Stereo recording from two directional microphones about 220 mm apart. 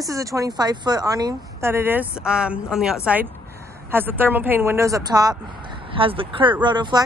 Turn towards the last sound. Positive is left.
turn(degrees=-20)  # may be behind; listen again after turning